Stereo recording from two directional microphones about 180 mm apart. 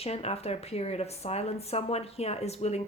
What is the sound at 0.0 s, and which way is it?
Speech, 35° left (ahead or behind).